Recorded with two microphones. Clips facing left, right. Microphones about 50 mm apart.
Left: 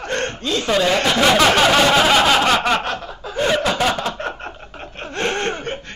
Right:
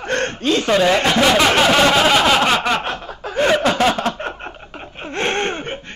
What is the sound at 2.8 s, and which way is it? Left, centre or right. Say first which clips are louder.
Speech: even; right.